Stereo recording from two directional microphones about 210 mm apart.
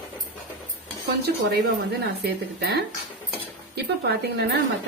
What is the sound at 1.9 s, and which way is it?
Speech, 50° right (ahead or behind).